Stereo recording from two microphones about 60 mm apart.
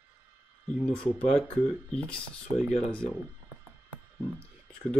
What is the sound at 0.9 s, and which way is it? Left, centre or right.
Speech, centre.